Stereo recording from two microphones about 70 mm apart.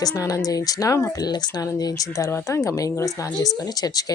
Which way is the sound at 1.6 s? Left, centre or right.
Left.